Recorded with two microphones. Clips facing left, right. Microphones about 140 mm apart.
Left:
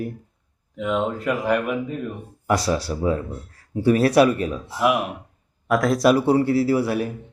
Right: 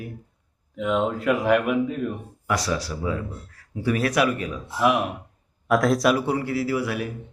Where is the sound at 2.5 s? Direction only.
30° left (ahead or behind).